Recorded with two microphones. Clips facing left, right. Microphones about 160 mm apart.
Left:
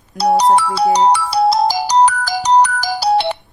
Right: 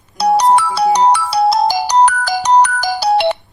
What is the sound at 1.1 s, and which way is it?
Ringtone, 60° right (ahead or behind).